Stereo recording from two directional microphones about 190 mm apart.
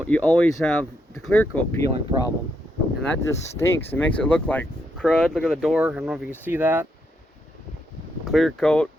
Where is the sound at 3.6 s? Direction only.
10° left (ahead or behind); by 6.8 s 10° right (ahead or behind).